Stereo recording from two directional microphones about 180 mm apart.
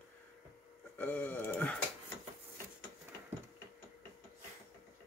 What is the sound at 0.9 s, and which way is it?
Speech, 10° left (ahead or behind).